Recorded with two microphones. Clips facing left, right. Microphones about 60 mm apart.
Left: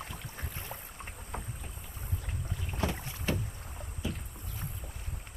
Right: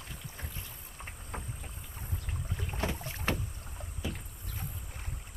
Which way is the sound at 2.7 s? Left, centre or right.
Right.